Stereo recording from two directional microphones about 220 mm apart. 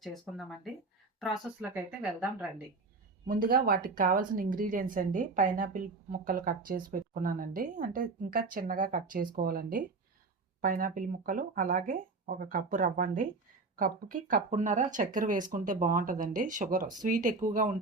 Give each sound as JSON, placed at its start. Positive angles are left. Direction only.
{"t": 0.0, "sound": "speech", "side_deg": 0}
{"t": 3.2, "sound": "speech", "side_deg": -40}